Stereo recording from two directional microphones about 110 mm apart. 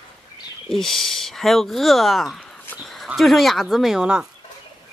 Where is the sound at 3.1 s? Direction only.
Centre (ahead or behind).